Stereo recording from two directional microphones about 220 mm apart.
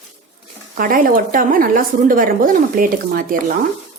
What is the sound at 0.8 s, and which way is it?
Speech, 40° right (ahead or behind).